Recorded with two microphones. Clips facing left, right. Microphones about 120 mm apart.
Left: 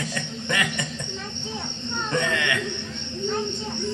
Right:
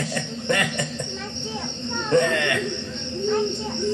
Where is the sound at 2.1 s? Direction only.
45° right (ahead or behind).